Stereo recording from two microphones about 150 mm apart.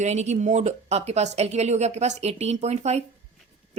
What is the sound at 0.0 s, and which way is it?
A woman's voice, 50° right (ahead or behind).